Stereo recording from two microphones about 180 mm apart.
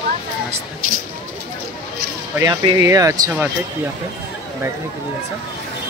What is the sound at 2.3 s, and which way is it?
Speech, 20° right (ahead or behind).